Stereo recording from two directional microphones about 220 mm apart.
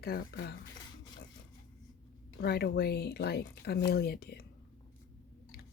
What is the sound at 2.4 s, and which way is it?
A woman's voice, 45° left (ahead or behind).